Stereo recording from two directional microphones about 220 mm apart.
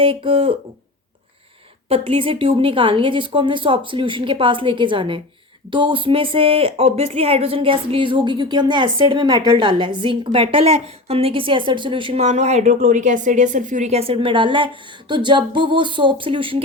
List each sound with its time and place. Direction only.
0.0 s speech: 25° right (ahead or behind)
1.9 s speech: 25° right (ahead or behind)